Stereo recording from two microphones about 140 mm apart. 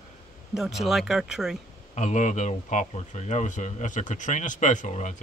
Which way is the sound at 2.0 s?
60° left (ahead or behind).